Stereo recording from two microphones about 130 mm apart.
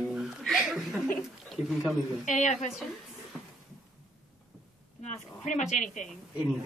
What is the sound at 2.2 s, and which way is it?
Speech, 70° left (ahead or behind).